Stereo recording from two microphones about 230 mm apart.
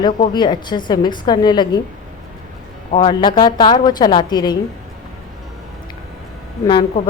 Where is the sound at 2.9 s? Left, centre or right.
Left.